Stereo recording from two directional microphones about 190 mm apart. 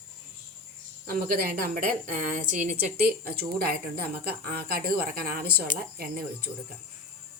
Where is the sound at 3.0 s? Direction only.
55° right (ahead or behind).